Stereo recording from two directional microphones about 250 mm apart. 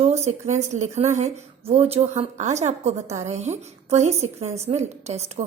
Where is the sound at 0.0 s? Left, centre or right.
Right.